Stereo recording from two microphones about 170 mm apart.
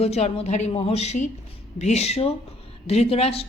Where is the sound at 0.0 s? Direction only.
35° left (ahead or behind).